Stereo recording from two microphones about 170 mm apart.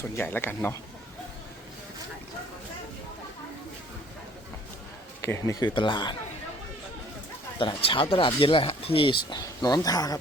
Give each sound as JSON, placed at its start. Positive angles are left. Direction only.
{"t": 0.2, "sound": "speech", "side_deg": 10}
{"t": 5.2, "sound": "speech", "side_deg": 15}
{"t": 7.6, "sound": "speech", "side_deg": 30}